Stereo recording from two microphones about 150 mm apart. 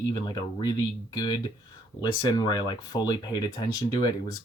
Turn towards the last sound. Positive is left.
turn(degrees=25)  # may be behind; listen again after turning